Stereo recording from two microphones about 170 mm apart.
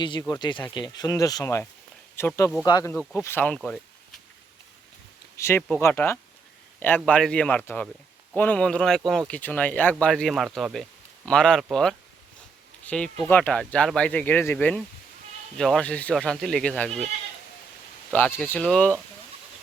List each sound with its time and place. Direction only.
0.0 s speech: 25° left (ahead or behind)
3.2 s speech: 15° left (ahead or behind)
5.4 s speech: 15° left (ahead or behind)
13.2 s speech: 10° left (ahead or behind)
18.1 s speech: 10° left (ahead or behind)